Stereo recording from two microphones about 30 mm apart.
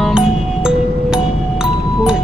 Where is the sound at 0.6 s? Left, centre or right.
Right.